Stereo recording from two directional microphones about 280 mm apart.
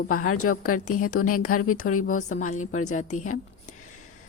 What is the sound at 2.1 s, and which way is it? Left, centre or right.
A woman's voice, left.